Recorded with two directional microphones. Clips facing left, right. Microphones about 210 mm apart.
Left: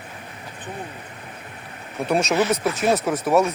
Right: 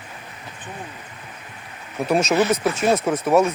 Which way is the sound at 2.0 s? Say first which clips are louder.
Right 2 dB; centre (ahead or behind).